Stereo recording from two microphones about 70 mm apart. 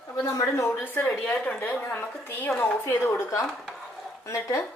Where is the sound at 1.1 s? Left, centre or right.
Centre; by 4.6 s left.